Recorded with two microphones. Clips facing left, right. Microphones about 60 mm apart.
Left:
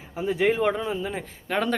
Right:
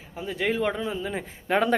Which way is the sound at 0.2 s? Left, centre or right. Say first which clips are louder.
Left 4 dB; centre.